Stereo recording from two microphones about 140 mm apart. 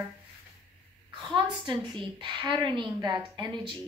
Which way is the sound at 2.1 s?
35° right (ahead or behind).